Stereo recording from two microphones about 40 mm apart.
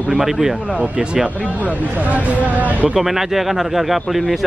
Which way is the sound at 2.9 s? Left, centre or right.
Centre.